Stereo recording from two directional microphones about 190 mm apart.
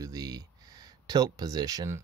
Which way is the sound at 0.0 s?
20° right (ahead or behind).